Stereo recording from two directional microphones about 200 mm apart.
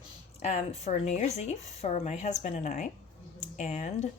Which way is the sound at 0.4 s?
35° left (ahead or behind).